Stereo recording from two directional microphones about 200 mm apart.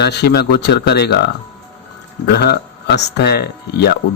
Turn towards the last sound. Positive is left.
turn(degrees=55)  # may be behind; listen again after turning